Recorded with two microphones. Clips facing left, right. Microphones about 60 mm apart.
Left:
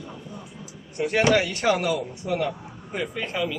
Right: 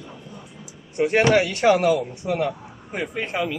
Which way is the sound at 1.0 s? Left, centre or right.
Right.